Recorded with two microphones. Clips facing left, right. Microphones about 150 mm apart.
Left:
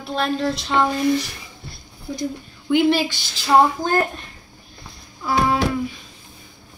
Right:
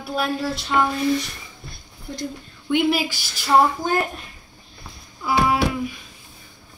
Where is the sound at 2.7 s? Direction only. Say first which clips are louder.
Left 3 dB; centre (ahead or behind).